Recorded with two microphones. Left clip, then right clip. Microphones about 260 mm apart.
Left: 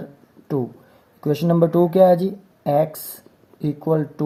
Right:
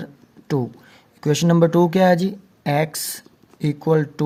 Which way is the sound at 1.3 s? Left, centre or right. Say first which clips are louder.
Right 1 dB; right.